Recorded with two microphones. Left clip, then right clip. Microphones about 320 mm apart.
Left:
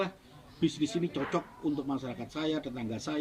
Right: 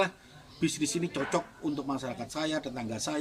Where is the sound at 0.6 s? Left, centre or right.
Centre.